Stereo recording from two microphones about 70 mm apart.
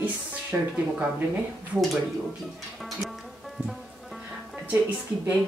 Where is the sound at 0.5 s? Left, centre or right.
Right.